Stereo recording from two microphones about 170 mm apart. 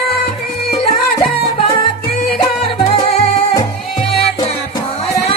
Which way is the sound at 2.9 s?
35° left (ahead or behind).